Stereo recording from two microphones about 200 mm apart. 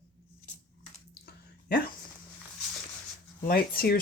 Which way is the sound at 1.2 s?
45° left (ahead or behind).